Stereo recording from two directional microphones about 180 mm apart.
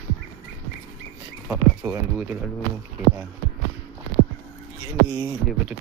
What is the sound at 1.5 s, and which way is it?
Speech, 10° right (ahead or behind).